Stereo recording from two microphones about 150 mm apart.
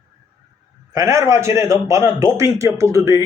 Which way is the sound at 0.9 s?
20° right (ahead or behind).